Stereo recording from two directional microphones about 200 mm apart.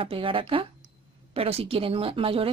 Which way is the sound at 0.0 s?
25° right (ahead or behind).